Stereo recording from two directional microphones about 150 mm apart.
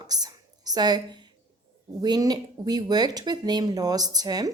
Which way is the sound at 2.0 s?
25° right (ahead or behind).